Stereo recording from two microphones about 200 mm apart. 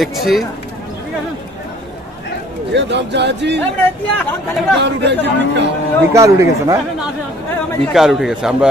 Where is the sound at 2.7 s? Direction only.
60° right (ahead or behind).